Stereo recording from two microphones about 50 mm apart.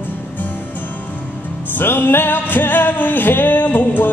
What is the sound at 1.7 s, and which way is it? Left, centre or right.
Music, left.